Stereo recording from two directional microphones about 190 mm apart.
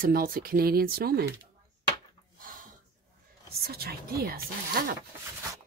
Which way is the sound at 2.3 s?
45° right (ahead or behind).